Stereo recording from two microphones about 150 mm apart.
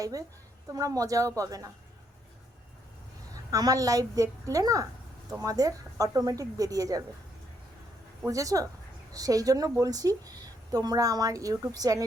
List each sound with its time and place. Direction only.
0.0 s a woman's voice: 25° right (ahead or behind)
3.5 s a woman's voice: 25° right (ahead or behind)
8.3 s a woman's voice: 20° right (ahead or behind)